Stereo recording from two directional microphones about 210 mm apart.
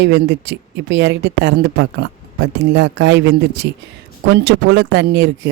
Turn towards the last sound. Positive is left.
turn(degrees=-55)  # may be behind; listen again after turning